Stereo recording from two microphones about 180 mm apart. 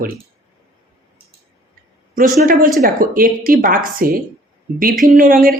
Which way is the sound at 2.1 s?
50° right (ahead or behind).